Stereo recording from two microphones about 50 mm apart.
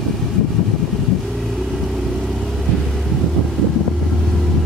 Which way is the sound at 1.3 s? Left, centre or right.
Centre.